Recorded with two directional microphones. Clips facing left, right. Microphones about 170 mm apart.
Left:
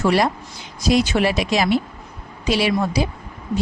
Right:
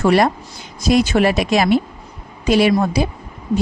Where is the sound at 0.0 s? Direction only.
55° right (ahead or behind).